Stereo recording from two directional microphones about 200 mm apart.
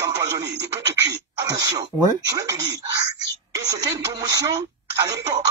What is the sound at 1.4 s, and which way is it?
Speech, 15° right (ahead or behind).